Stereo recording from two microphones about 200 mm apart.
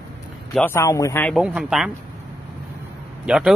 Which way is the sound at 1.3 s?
5° right (ahead or behind).